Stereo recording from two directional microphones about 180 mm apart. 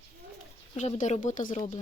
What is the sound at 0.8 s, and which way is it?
Speech, 40° left (ahead or behind).